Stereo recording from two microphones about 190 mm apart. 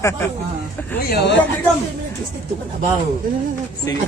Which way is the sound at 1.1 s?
65° left (ahead or behind).